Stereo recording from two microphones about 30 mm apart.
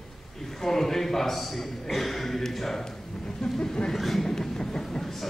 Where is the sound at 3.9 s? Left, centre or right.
Centre.